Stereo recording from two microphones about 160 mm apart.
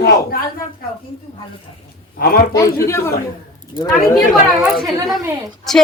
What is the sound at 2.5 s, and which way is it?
Speech, 15° left (ahead or behind).